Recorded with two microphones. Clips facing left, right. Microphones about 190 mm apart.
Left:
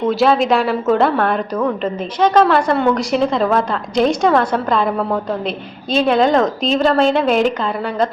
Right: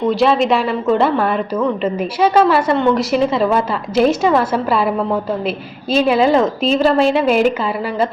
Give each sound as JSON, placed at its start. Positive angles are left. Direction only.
{"t": 0.0, "sound": "a woman's voice", "side_deg": 0}